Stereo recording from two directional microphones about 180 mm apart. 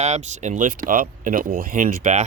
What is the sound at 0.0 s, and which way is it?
Speech, 40° right (ahead or behind).